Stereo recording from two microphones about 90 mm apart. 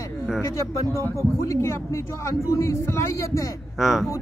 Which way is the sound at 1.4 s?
30° left (ahead or behind).